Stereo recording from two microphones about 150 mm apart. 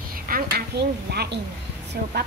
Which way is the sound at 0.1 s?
80° right.